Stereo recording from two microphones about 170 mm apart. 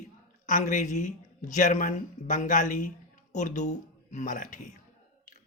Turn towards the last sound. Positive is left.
turn(degrees=50)  # may be behind; listen again after turning